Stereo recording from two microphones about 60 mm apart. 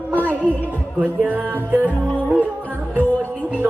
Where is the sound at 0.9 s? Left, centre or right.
Right.